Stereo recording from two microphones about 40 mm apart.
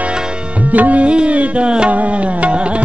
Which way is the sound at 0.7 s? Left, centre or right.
Right.